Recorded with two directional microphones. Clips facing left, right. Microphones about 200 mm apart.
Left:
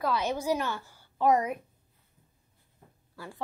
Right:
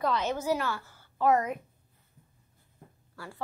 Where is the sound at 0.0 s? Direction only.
10° left (ahead or behind).